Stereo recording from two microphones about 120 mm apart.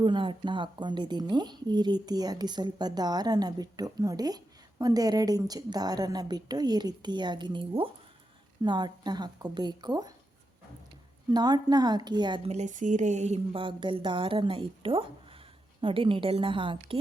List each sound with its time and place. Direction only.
0.0 s a woman's voice: 40° right (ahead or behind)
11.3 s a woman's voice: 35° right (ahead or behind)
12.5 s speech: 80° right
13.5 s a woman's voice: 45° right (ahead or behind)